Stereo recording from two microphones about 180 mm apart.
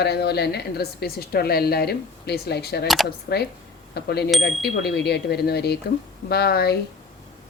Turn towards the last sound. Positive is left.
turn(degrees=60)  # may be behind; listen again after turning